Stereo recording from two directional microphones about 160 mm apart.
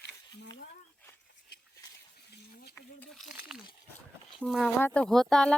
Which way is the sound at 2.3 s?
80° left.